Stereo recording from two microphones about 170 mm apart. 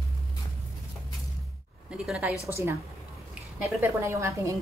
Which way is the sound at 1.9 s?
5° right (ahead or behind).